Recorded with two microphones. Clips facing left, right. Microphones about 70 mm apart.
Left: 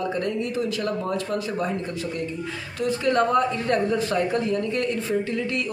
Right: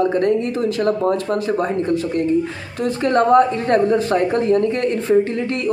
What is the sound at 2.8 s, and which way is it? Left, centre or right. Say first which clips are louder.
A man's voice: right 5 dB; right.